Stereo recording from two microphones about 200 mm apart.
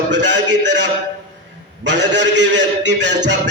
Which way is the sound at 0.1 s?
60° right (ahead or behind).